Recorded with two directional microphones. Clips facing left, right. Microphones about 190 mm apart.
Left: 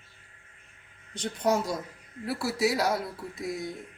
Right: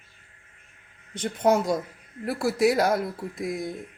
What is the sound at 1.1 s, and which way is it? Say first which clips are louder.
A woman's voice: right 5 dB; 55° right (ahead or behind).